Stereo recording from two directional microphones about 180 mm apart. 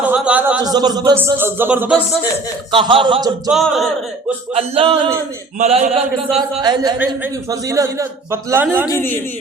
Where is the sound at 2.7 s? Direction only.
30° right (ahead or behind).